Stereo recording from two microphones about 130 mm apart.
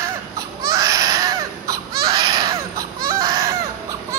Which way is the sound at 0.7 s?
25° right (ahead or behind).